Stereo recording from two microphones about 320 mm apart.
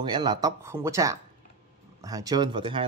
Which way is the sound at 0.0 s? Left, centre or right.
Centre.